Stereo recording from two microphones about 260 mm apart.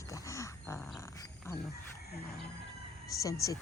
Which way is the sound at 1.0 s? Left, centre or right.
Centre.